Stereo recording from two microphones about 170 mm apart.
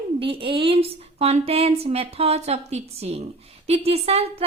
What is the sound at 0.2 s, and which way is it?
A woman's voice, 30° right (ahead or behind).